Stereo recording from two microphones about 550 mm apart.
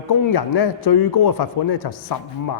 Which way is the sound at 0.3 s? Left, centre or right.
Left.